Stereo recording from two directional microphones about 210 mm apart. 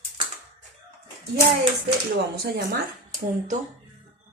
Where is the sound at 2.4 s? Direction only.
50° right (ahead or behind).